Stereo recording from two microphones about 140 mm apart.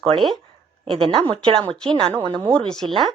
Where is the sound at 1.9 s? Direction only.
35° right (ahead or behind).